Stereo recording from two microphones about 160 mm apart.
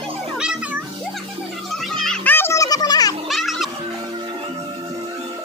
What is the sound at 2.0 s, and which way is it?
Music, 5° left (ahead or behind).